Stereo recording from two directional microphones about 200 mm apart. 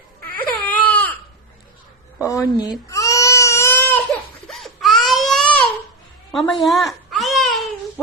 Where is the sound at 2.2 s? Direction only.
15° left (ahead or behind).